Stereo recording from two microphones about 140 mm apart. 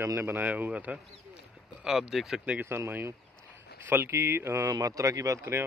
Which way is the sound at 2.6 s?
15° right (ahead or behind).